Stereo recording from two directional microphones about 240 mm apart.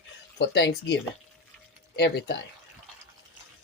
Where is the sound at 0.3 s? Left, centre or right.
Left.